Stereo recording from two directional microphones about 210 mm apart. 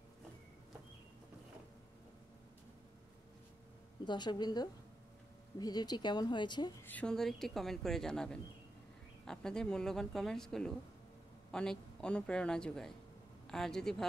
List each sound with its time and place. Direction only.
4.0 s a woman's voice: 20° left (ahead or behind)
6.8 s speech: 5° left (ahead or behind)